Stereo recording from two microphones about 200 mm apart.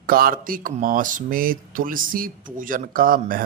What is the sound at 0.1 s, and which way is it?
Speech, 45° right (ahead or behind).